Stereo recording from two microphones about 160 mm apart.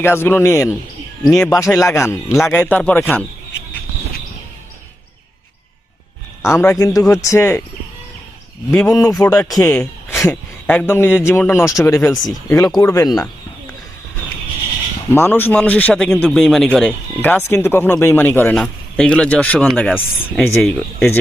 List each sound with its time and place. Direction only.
0.0 s speech: 15° left (ahead or behind)
6.4 s speech: 15° left (ahead or behind)
8.7 s speech: 15° left (ahead or behind)
15.1 s speech: 15° left (ahead or behind)